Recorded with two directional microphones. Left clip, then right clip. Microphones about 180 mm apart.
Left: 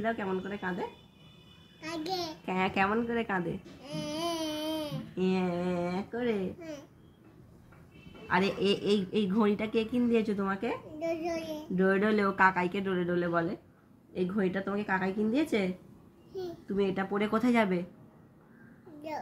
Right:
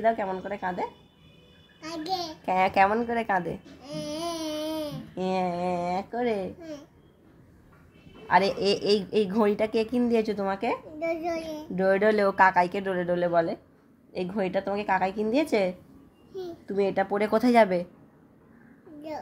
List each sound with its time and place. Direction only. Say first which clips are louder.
0.0 s a woman's voice: right 7 dB; 50° right (ahead or behind)
1.8 s a child's voice: right 4 dB; 10° right (ahead or behind)
2.4 s a woman's voice: right 9 dB; 55° right (ahead or behind)
3.8 s babbling: right 2 dB; 10° right (ahead or behind)
5.1 s a woman's voice: right 4 dB; 50° right (ahead or behind)
8.3 s a woman's voice: right 6 dB; 50° right (ahead or behind)
11.0 s a child's voice: right 4 dB; 15° right (ahead or behind)
11.7 s a woman's voice: right 5 dB; 45° right (ahead or behind)
19.1 s a child's voice: right 2 dB; centre (ahead or behind)